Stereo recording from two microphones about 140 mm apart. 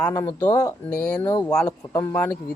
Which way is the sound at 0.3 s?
30° left (ahead or behind).